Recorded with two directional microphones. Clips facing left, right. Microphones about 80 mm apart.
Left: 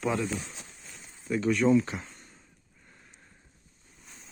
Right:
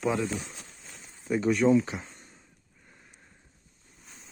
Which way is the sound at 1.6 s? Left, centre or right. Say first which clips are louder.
Even; centre.